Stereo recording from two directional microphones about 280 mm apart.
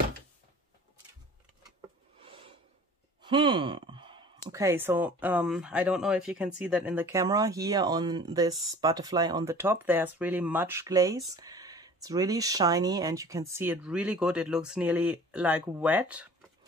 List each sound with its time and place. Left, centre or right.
2.1 s filing: centre
3.2 s speech: centre